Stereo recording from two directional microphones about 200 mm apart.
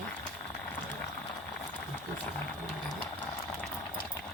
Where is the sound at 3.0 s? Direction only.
5° left (ahead or behind).